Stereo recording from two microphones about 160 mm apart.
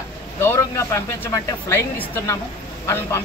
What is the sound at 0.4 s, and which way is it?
Speech, 15° left (ahead or behind).